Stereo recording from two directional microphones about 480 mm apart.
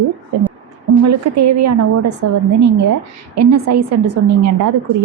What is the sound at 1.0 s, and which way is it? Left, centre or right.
A woman's voice, right.